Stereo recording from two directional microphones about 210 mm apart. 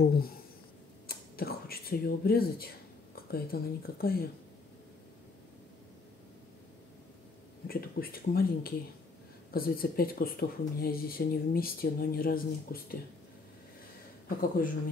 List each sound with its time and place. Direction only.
0.0 s speech: 45° left (ahead or behind)
1.0 s a sound: 45° left (ahead or behind)
3.3 s speech: 45° left (ahead or behind)
7.6 s speech: 45° left (ahead or behind)